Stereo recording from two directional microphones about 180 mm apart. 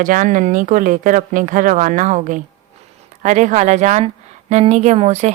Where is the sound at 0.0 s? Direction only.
45° right (ahead or behind).